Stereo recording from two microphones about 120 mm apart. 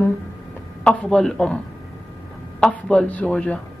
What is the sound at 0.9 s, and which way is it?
Speech, 5° left (ahead or behind).